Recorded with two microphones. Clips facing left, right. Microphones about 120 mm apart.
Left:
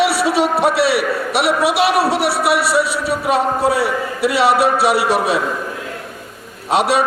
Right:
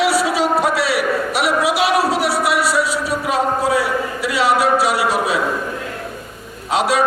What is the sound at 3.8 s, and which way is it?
Speech, 65° left (ahead or behind).